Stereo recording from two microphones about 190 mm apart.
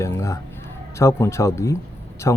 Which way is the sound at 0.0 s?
15° left (ahead or behind).